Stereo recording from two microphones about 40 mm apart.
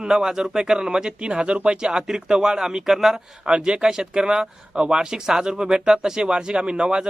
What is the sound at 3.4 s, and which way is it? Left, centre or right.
Speech, centre.